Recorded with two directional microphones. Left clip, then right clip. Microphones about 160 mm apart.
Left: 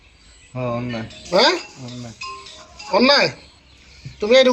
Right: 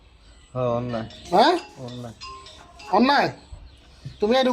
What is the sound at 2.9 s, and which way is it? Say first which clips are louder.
Speech: left 4 dB; 60° right (ahead or behind).